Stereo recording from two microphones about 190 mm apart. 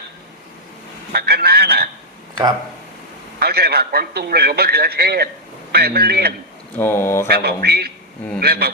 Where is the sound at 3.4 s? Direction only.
55° right (ahead or behind).